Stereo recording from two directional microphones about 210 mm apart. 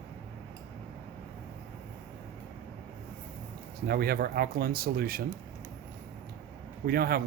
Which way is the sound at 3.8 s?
45° right (ahead or behind).